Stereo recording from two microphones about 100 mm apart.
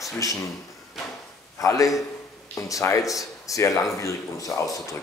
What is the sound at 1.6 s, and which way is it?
A man's voice, 35° left (ahead or behind).